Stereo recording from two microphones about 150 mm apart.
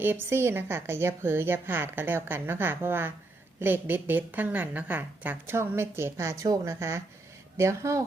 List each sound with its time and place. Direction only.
0.0 s a woman's voice: 15° right (ahead or behind)